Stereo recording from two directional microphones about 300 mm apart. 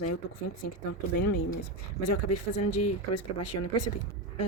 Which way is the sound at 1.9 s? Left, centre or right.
Left.